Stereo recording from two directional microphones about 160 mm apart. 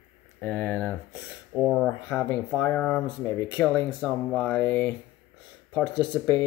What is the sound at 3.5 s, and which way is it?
Speech, 10° left (ahead or behind).